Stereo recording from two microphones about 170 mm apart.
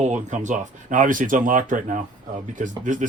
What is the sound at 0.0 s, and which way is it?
Speech, 45° right (ahead or behind).